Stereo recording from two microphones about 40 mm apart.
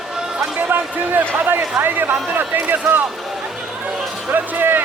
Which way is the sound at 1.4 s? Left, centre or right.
Right.